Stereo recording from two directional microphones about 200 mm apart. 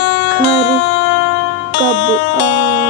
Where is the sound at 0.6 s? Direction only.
65° left (ahead or behind).